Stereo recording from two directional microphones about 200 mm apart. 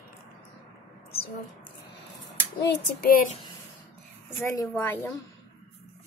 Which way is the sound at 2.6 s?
50° left (ahead or behind).